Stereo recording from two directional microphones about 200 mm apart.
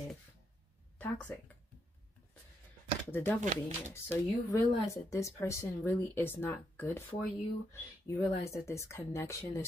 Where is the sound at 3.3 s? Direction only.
40° right (ahead or behind).